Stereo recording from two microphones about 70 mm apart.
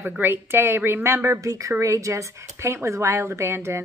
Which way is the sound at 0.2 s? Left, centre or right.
Right.